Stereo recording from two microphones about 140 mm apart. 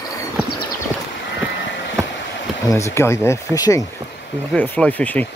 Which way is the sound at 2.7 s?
20° left (ahead or behind).